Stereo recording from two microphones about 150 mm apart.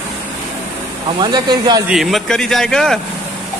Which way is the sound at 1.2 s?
30° right (ahead or behind).